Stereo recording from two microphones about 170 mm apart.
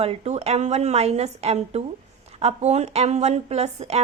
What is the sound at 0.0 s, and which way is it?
A woman's voice, 40° right (ahead or behind).